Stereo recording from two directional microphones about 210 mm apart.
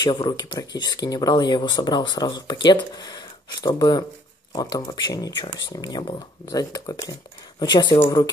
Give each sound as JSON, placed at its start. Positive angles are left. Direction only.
{"t": 0.0, "sound": "speech", "side_deg": 20}